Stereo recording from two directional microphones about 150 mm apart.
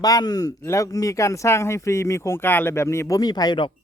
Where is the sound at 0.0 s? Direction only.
25° left (ahead or behind).